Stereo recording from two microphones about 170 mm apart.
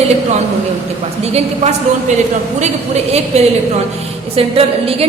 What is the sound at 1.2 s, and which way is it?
A woman's voice, 40° right (ahead or behind).